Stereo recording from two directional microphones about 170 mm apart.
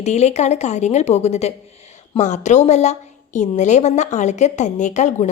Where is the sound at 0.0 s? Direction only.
40° left (ahead or behind).